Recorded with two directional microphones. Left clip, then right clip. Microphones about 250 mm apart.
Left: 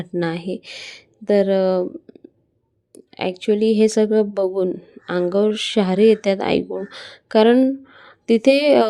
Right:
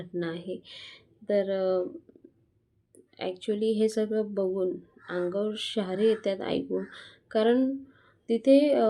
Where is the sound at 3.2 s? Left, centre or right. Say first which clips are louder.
Left 11 dB; left.